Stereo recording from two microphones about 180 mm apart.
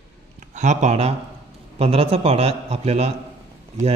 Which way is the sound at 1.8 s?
35° right (ahead or behind).